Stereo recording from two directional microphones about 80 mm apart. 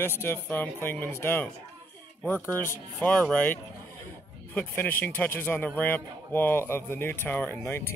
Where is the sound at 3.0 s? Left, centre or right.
Centre.